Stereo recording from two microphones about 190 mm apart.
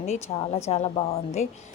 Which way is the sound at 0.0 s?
35° left (ahead or behind).